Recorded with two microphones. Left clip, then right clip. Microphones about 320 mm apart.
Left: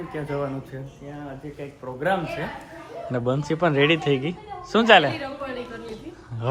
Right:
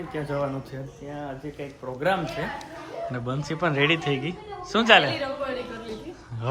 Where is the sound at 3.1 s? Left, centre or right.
Centre.